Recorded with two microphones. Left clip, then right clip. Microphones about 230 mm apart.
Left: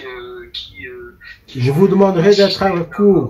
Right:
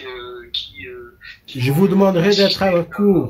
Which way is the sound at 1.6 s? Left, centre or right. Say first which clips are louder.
Left 4 dB; right.